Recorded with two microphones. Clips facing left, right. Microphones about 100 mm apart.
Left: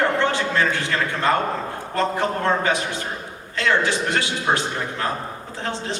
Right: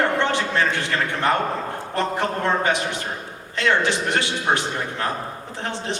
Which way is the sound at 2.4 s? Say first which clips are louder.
Right 1 dB; 20° right (ahead or behind).